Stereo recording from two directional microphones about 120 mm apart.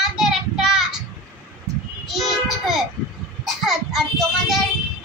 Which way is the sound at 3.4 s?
5° right (ahead or behind).